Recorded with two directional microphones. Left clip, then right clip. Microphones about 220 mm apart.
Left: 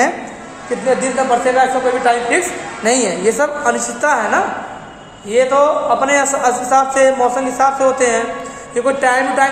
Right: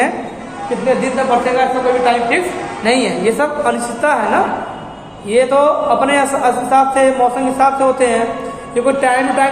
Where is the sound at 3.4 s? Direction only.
15° left (ahead or behind).